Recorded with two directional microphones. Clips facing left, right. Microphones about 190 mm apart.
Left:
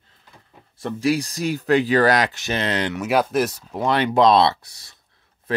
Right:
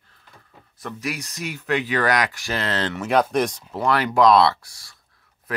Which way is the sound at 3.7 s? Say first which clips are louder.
Left 1 dB; 20° left (ahead or behind).